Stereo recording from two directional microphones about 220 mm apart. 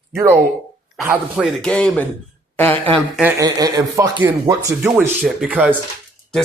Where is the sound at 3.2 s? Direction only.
15° right (ahead or behind).